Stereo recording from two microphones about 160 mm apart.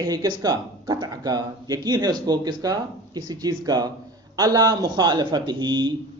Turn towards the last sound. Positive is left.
turn(degrees=-30)  # may be behind; listen again after turning